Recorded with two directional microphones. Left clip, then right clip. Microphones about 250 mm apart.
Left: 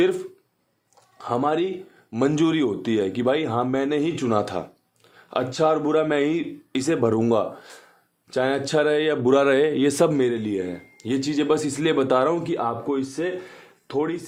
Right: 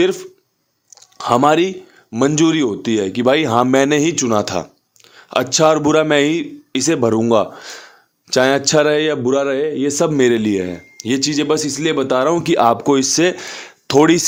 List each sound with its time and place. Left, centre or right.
0.0 s speech: right
0.9 s a sound: right
2.1 s speech: right
9.2 s speech: centre
10.2 s speech: right